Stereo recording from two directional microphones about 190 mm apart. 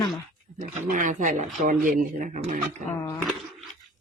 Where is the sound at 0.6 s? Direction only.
40° right (ahead or behind).